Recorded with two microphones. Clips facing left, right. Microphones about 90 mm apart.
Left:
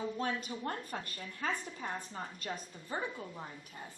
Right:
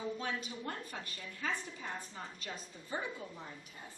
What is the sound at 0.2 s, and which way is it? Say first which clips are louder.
A woman's voice: left 4 dB; 45° left (ahead or behind).